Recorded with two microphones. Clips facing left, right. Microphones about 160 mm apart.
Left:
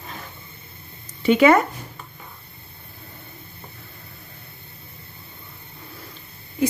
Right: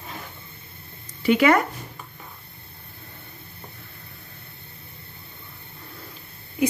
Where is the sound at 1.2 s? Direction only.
25° left (ahead or behind).